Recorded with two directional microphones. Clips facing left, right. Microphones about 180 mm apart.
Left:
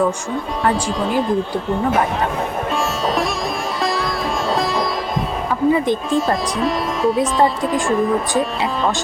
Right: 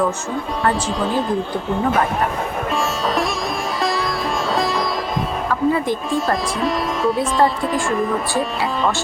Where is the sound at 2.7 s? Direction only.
Centre (ahead or behind).